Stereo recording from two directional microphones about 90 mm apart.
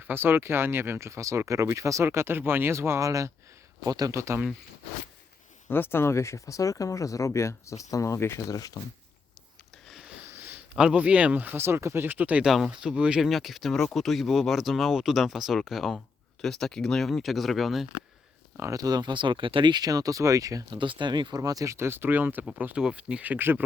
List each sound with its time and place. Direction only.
0.0 s speech: 25° right (ahead or behind)
5.6 s speech: 25° left (ahead or behind); by 8.8 s 40° left (ahead or behind)
9.9 s a sound: 5° right (ahead or behind)
10.2 s a sound: 25° right (ahead or behind)
10.8 s speech: 15° right (ahead or behind)
18.5 s speech: 35° right (ahead or behind)
20.7 s speech: 65° right (ahead or behind); by 23.6 s 20° right (ahead or behind)